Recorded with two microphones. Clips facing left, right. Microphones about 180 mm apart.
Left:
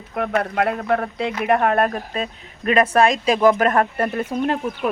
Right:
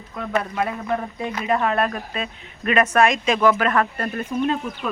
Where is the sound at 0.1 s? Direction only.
60° left (ahead or behind); by 3.8 s 45° left (ahead or behind).